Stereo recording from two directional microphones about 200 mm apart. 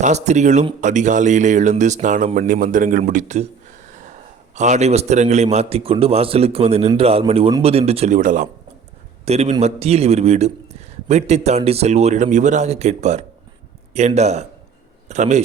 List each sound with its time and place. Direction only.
0.0 s a man's voice: 35° right (ahead or behind)
4.5 s a man's voice: 35° right (ahead or behind)